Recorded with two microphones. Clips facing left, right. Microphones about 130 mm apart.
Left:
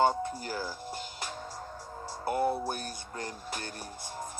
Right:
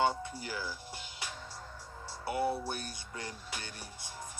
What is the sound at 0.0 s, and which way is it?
Speech, 45° left (ahead or behind).